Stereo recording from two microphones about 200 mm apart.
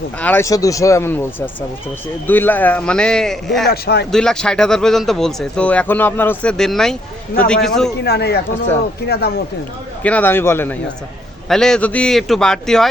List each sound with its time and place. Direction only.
0.2 s a man's voice: 10° left (ahead or behind)
3.7 s speech: 50° left (ahead or behind)
4.1 s a man's voice: 5° left (ahead or behind)
8.0 s speech: 55° left (ahead or behind)
10.0 s a man's voice: 10° left (ahead or behind)